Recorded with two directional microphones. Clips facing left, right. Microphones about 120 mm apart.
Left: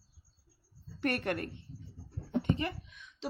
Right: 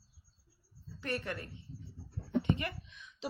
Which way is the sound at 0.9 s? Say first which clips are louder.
Left 6 dB; 60° left (ahead or behind).